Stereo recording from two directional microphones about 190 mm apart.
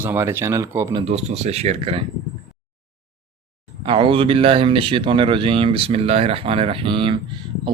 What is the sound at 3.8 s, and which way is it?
Speech, 25° right (ahead or behind).